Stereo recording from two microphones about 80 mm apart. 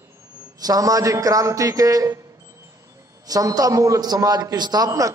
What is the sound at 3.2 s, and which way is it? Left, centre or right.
A man's voice, right.